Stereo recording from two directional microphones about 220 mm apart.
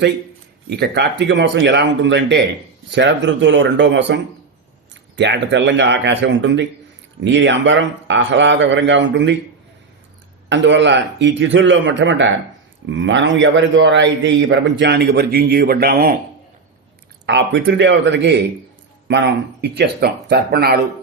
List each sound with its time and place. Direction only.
0.7 s a man's voice: 50° right (ahead or behind)
10.5 s a man's voice: 55° right (ahead or behind)
17.2 s a man's voice: 55° right (ahead or behind)